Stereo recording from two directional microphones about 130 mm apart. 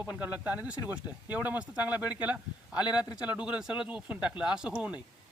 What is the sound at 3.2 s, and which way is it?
Speech, 10° right (ahead or behind).